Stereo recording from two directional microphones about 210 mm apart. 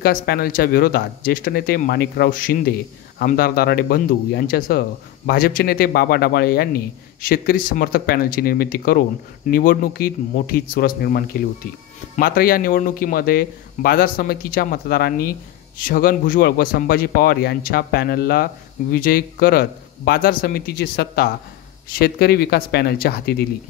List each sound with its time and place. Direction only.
0.0 s speech: 45° left (ahead or behind)